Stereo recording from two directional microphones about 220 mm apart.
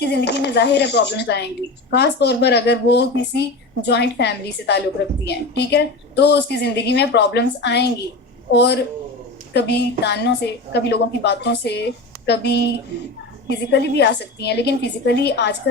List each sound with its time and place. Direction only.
0.0 s speech: 50° left (ahead or behind)